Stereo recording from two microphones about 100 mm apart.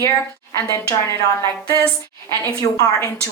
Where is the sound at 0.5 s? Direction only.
30° left (ahead or behind).